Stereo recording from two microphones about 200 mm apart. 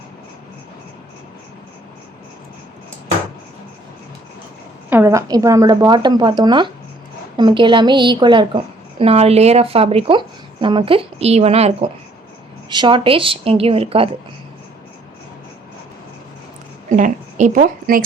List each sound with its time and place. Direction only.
4.9 s a woman's voice: 10° right (ahead or behind); by 14.1 s 30° right (ahead or behind)
16.9 s a woman's voice: 35° right (ahead or behind)